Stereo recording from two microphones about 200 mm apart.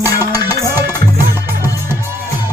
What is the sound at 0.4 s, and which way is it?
Music, 10° right (ahead or behind).